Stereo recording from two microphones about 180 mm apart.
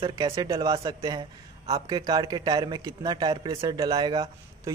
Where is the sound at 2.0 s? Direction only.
20° right (ahead or behind).